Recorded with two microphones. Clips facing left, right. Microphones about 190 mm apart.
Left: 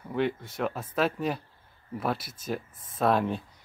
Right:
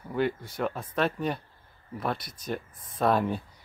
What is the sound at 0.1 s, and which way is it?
Speech, centre (ahead or behind).